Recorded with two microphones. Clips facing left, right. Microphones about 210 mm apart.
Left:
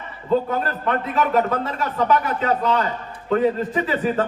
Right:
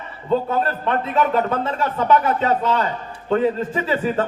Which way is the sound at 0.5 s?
30° right (ahead or behind).